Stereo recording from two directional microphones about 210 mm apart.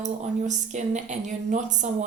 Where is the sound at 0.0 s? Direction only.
35° right (ahead or behind).